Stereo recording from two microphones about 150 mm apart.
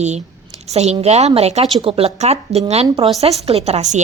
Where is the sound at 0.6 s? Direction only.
45° right (ahead or behind).